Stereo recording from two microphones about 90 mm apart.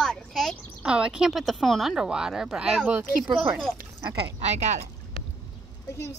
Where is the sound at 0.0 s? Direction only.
5° left (ahead or behind).